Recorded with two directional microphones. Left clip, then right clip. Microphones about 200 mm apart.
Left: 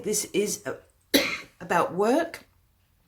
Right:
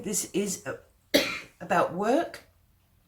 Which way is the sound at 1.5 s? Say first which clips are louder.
Left 1 dB; 40° left (ahead or behind).